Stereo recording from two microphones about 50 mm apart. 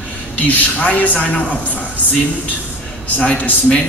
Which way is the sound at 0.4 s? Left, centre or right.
Left.